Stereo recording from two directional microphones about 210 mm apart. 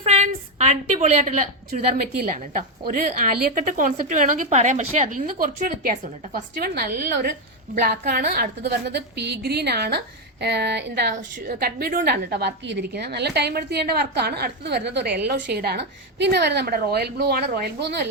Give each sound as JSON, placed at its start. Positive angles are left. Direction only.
{"t": 0.0, "sound": "a woman's voice", "side_deg": -30}
{"t": 11.1, "sound": "a woman's voice", "side_deg": -40}